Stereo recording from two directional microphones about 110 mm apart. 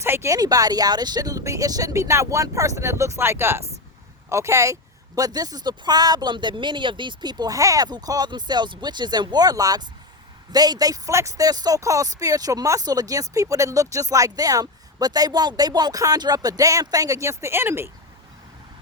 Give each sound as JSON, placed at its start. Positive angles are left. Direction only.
{"t": 0.0, "sound": "speech", "side_deg": -25}